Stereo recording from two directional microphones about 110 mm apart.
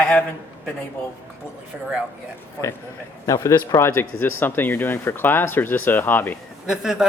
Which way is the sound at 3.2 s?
30° left (ahead or behind).